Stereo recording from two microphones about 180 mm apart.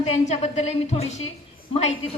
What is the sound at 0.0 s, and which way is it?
A woman's voice, 35° left (ahead or behind).